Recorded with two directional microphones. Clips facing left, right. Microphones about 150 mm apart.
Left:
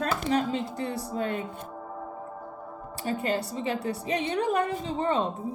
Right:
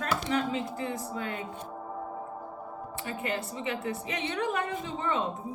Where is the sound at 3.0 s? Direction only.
35° left (ahead or behind).